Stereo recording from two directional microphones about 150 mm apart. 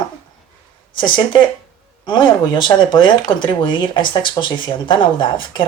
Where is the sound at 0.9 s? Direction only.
35° left (ahead or behind).